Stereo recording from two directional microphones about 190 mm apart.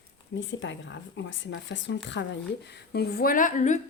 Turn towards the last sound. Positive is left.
turn(degrees=40)  # may be behind; listen again after turning